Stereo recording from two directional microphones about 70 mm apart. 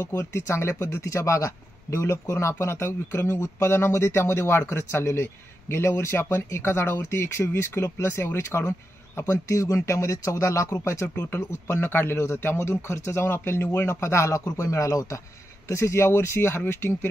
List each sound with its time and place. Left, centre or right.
0.0 s a man's voice: left